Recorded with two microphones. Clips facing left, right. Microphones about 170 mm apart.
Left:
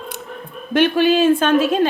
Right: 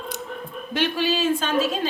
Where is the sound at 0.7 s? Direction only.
55° left (ahead or behind).